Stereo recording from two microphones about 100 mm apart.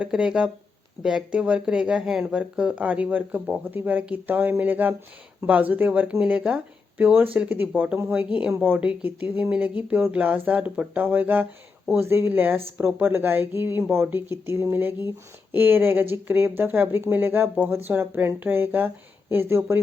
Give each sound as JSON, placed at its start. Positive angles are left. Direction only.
{"t": 0.0, "sound": "speech", "side_deg": -10}